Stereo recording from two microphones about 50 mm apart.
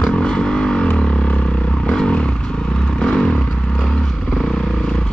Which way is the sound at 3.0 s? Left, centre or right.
Centre.